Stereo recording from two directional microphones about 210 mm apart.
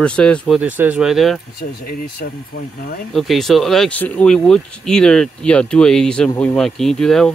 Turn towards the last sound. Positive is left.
turn(degrees=0)  # may be behind; listen again after turning